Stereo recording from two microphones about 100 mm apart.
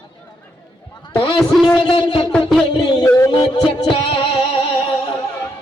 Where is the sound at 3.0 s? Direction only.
30° left (ahead or behind).